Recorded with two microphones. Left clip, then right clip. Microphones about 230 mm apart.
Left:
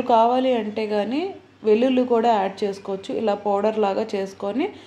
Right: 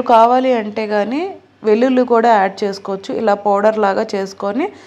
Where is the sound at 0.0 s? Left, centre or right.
Centre.